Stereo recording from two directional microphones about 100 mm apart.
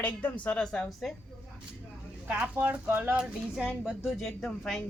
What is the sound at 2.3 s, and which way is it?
Speech, 15° right (ahead or behind).